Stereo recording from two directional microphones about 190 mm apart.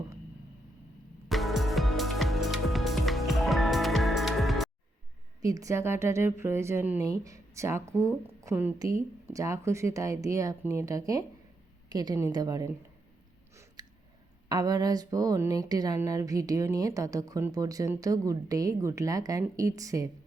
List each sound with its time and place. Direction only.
1.3 s music: centre (ahead or behind)
5.4 s a woman's voice: 20° right (ahead or behind)
13.8 s a sound: 20° right (ahead or behind)
14.5 s speech: 20° right (ahead or behind)